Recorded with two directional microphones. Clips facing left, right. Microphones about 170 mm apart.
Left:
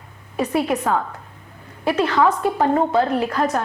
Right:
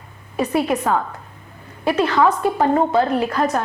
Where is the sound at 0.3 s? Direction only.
10° right (ahead or behind).